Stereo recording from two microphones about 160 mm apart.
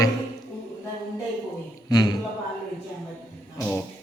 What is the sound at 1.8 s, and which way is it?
Speech, 25° left (ahead or behind).